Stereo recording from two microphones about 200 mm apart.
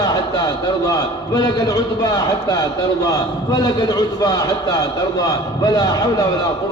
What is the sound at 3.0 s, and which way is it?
A man's voice, 20° left (ahead or behind).